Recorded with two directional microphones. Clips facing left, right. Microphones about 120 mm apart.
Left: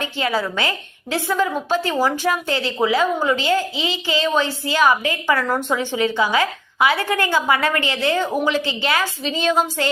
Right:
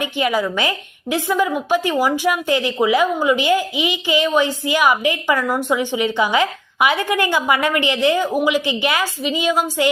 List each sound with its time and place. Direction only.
0.0 s a woman's voice: 15° right (ahead or behind)